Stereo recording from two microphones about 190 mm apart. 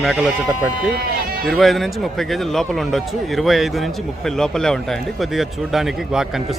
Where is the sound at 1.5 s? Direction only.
Centre (ahead or behind).